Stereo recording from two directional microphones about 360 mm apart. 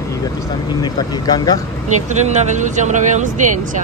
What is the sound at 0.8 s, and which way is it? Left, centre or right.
Speech, centre.